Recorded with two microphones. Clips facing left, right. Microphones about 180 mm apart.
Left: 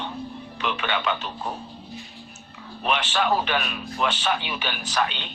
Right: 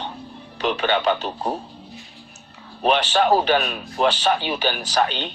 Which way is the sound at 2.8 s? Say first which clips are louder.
Right 6 dB; 35° right (ahead or behind).